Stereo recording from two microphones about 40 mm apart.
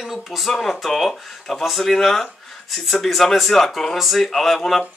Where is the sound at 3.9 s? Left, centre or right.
Centre.